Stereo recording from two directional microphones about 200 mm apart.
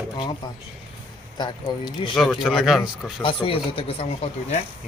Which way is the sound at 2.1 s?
Centre (ahead or behind).